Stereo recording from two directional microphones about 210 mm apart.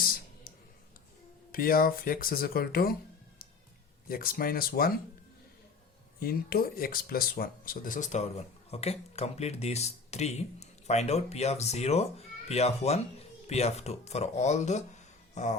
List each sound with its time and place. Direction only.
0.0 s clicking: 45° left (ahead or behind)
1.5 s speech: 45° left (ahead or behind)
4.1 s speech: 45° left (ahead or behind)
6.1 s speech: 45° left (ahead or behind)